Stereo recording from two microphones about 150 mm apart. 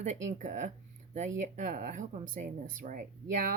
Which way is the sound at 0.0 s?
55° right (ahead or behind).